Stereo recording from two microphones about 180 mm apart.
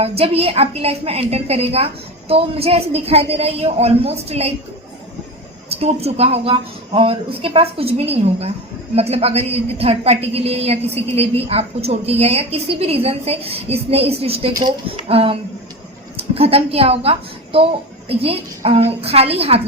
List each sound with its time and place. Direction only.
0.0 s a woman's voice: 35° right (ahead or behind)
5.8 s a woman's voice: 35° right (ahead or behind)